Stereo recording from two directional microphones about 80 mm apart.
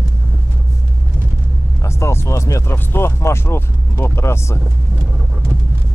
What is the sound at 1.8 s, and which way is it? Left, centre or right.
Speech, left.